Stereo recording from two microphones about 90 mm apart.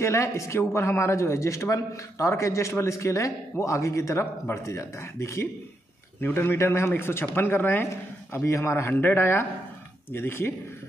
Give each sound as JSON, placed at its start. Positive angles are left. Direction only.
{"t": 0.0, "sound": "speech", "side_deg": 35}